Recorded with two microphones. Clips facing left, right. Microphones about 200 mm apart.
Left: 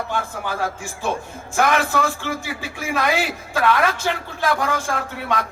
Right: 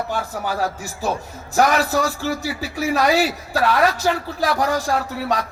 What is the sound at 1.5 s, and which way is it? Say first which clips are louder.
A man's voice: right 2 dB; 40° right (ahead or behind).